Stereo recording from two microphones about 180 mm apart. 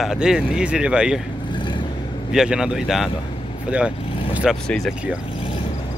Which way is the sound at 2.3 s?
5° right (ahead or behind).